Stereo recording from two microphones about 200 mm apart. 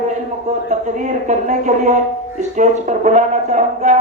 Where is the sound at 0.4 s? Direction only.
35° right (ahead or behind).